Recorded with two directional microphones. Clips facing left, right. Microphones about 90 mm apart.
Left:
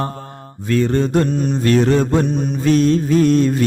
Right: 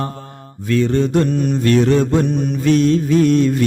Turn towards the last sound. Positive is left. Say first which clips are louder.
# even
turn(degrees=35)  # may be behind; listen again after turning